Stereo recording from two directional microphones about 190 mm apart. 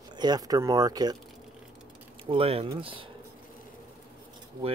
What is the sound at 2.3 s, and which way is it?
Speech, 30° right (ahead or behind).